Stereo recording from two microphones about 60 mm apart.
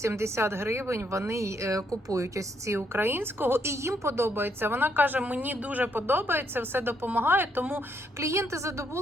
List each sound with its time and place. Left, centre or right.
0.0 s a woman's voice: right
2.7 s speech: right
4.4 s speech: right
8.2 s a woman's voice: right